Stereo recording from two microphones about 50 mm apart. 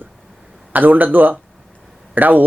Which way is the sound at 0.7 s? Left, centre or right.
Right.